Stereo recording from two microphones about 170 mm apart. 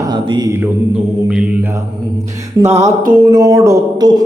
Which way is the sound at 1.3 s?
5° right (ahead or behind).